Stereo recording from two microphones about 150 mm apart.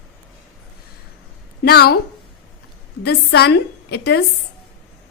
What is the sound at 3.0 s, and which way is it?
A woman's voice, 90° left.